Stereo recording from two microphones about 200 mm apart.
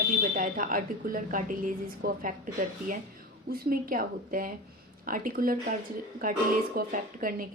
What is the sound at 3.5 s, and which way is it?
Speech, 45° right (ahead or behind).